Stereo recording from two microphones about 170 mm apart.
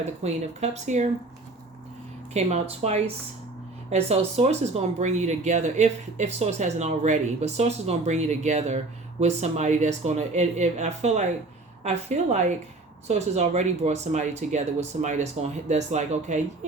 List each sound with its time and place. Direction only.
0.0 s speech: 40° right (ahead or behind)
2.3 s speech: 40° right (ahead or behind)